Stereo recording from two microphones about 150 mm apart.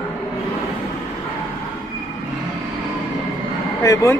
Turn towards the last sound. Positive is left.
turn(degrees=20)  # may be behind; listen again after turning